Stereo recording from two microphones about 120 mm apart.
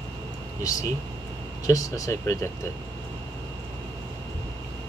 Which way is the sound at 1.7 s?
30° left (ahead or behind).